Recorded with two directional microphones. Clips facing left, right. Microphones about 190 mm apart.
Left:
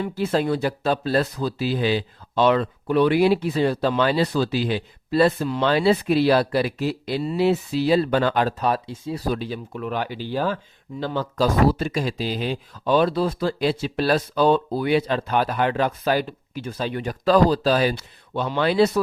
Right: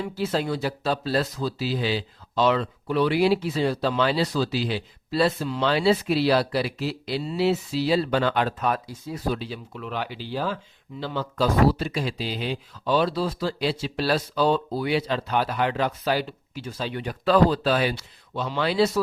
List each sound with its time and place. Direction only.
0.2 s speech: 55° left (ahead or behind); by 9.2 s 30° left (ahead or behind)
9.2 s speech: 45° left (ahead or behind)
17.9 s speech: 55° left (ahead or behind)